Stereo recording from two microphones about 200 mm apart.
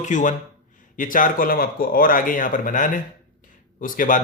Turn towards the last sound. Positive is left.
turn(degrees=40)  # may be behind; listen again after turning